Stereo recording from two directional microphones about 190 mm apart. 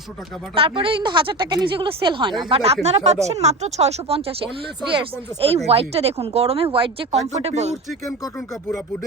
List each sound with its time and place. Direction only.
0.5 s speech: 30° right (ahead or behind)